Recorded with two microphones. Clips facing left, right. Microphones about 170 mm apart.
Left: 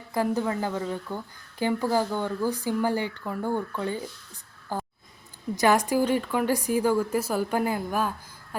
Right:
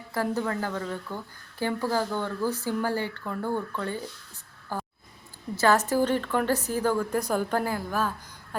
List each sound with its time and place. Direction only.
0.1 s a woman's voice: 15° left (ahead or behind)
4.7 s a sound: 15° left (ahead or behind)
5.5 s a woman's voice: 15° left (ahead or behind)
7.6 s a woman's voice: 15° left (ahead or behind)